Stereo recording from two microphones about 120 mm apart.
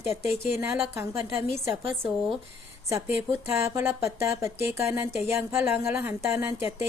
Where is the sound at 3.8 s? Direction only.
20° right (ahead or behind).